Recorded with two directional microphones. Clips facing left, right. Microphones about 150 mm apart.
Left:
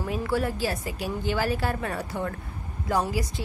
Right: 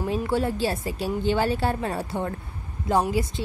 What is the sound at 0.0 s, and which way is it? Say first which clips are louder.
A woman's voice: right 2 dB; 25° right (ahead or behind).